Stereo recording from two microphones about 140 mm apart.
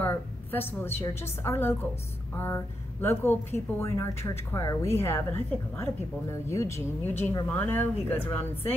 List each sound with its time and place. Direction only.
0.0 s a woman's voice: 15° left (ahead or behind)